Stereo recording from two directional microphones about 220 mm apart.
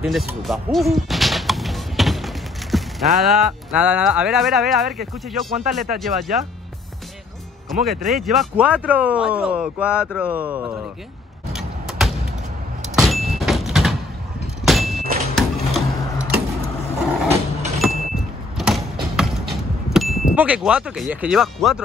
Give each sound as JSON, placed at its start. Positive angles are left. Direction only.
{"t": 0.0, "sound": "music", "side_deg": 0}
{"t": 3.2, "sound": "speech", "side_deg": 0}
{"t": 8.0, "sound": "speech", "side_deg": 0}
{"t": 12.9, "sound": "vehicle", "side_deg": 0}
{"t": 15.3, "sound": "printer", "side_deg": 0}
{"t": 17.3, "sound": "vehicle", "side_deg": -30}
{"t": 17.7, "sound": "a sound", "side_deg": 0}
{"t": 20.3, "sound": "speech", "side_deg": -5}